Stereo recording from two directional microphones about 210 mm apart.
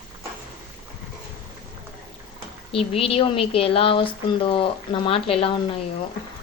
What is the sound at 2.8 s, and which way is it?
A woman's voice, 25° left (ahead or behind).